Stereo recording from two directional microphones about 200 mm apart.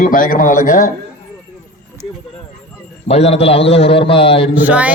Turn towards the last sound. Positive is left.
turn(degrees=-5)  # may be behind; listen again after turning